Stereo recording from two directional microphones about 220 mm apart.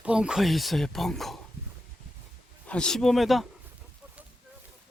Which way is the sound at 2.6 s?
5° left (ahead or behind).